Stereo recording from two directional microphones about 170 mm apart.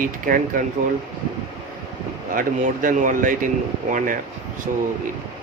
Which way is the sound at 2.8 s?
50° right (ahead or behind).